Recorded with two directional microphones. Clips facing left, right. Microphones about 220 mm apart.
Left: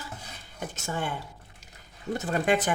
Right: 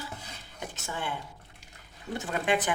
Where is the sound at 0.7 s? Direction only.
45° left (ahead or behind).